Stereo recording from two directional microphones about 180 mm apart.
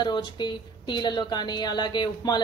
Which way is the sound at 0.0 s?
25° left (ahead or behind).